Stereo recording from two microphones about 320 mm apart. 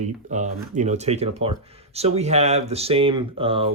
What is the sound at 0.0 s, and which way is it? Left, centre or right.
Speech, right.